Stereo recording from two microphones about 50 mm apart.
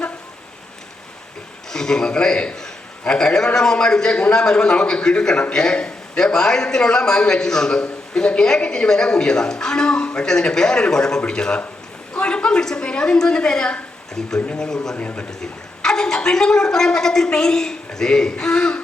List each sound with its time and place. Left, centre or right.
1.7 s a man's voice: centre
14.9 s speech: left
15.3 s a man's voice: centre